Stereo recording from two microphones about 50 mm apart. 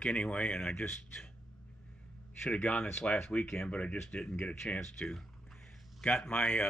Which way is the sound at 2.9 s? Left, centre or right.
Centre.